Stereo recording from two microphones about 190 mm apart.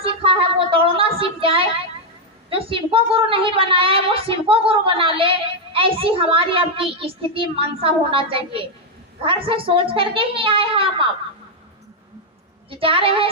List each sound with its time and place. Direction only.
0.0 s child singing: 30° right (ahead or behind)
2.5 s a woman's voice: 30° right (ahead or behind)
12.7 s a woman's voice: 30° right (ahead or behind)